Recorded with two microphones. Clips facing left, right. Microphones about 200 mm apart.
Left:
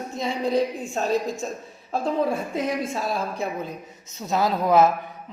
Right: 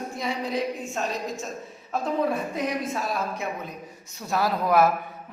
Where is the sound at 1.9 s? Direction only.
30° left (ahead or behind).